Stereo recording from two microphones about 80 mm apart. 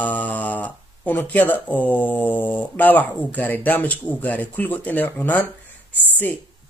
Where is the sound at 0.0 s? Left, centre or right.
Centre.